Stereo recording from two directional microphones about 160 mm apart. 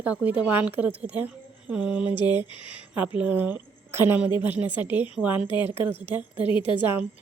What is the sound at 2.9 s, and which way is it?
A woman's voice, 10° right (ahead or behind).